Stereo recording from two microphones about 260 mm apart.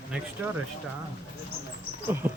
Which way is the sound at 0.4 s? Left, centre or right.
Centre.